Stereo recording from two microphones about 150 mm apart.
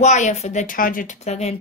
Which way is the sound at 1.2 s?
45° left (ahead or behind).